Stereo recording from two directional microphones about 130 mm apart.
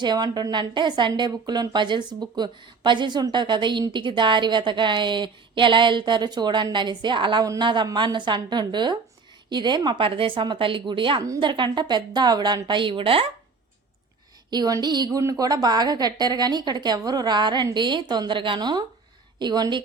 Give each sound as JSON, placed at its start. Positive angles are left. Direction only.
{"t": 0.0, "sound": "a woman's voice", "side_deg": -35}
{"t": 11.2, "sound": "a woman's voice", "side_deg": -25}
{"t": 11.4, "sound": "a woman's voice", "side_deg": -40}
{"t": 14.5, "sound": "a woman's voice", "side_deg": -30}